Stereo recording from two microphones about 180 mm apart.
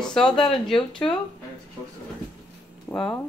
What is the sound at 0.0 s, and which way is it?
Speech, 5° left (ahead or behind).